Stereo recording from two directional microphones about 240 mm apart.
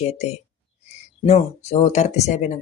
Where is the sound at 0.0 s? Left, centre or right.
Left.